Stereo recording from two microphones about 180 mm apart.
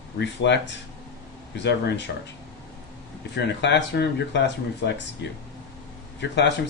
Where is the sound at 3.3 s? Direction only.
75° left (ahead or behind).